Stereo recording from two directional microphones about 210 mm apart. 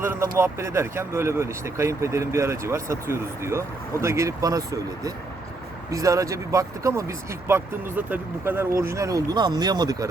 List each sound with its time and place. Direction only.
0.0 s speech: 10° right (ahead or behind)